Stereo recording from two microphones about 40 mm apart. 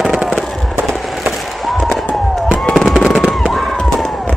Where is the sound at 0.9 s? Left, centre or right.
Centre.